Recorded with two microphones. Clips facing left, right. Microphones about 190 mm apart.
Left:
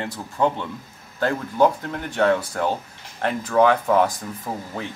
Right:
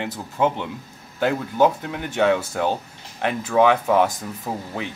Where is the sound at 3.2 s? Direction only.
5° right (ahead or behind).